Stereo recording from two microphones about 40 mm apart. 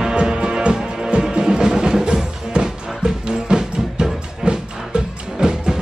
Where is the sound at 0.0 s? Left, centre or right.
Centre.